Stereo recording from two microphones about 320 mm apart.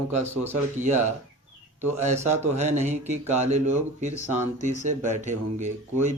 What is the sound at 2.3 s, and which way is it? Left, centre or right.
Speech, right.